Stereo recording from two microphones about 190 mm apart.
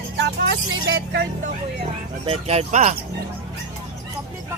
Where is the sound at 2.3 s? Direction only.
35° right (ahead or behind).